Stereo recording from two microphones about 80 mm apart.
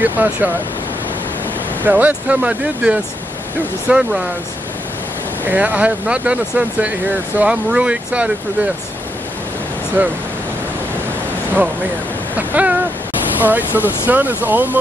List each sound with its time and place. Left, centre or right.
0.0 s speech: right
1.8 s speech: right
5.4 s speech: right
10.0 s speech: right
12.4 s speech: centre